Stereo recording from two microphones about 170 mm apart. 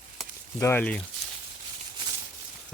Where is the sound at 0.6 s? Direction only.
10° left (ahead or behind).